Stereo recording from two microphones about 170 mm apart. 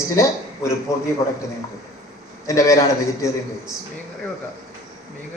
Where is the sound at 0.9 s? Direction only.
20° left (ahead or behind).